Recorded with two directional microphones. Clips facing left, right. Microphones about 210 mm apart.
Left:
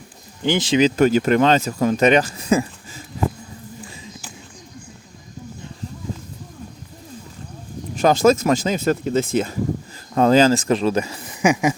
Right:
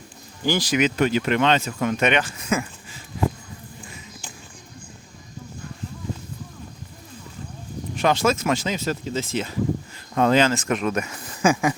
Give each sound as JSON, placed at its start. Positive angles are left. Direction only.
{"t": 0.4, "sound": "speech", "side_deg": 20}
{"t": 7.9, "sound": "speech", "side_deg": 40}
{"t": 10.2, "sound": "speech", "side_deg": 35}
{"t": 11.3, "sound": "speech", "side_deg": 15}